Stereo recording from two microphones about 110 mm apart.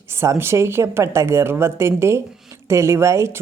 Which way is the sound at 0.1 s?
25° right (ahead or behind).